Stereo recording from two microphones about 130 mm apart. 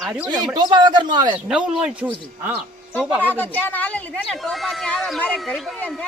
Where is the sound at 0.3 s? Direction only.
30° right (ahead or behind).